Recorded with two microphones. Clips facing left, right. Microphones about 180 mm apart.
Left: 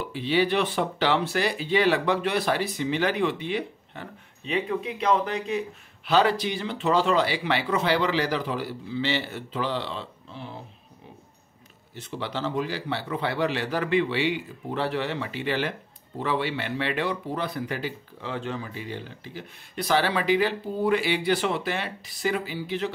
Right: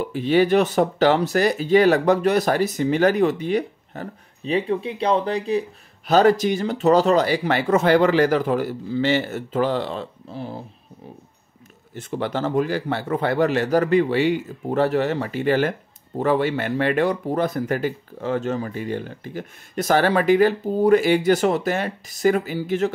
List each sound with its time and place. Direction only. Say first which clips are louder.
0.0 s speech: right 6 dB; 45° right (ahead or behind)
6.0 s speech: right 6 dB; 45° right (ahead or behind)
11.9 s speech: right 7 dB; 50° right (ahead or behind)